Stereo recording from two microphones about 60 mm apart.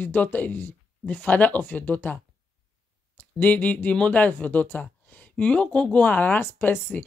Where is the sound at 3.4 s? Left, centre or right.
Left.